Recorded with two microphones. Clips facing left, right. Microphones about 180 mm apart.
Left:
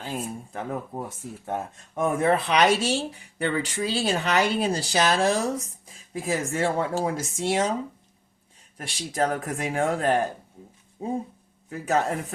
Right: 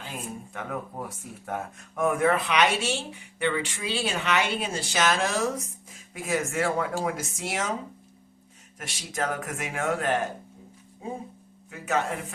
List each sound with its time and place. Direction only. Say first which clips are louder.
0.0 s speech: left 5 dB; 35° left (ahead or behind)
8.8 s speech: left 5 dB; 35° left (ahead or behind)